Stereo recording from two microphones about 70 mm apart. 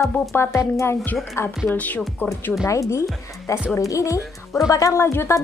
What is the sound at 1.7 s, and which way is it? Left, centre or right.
Speech, left.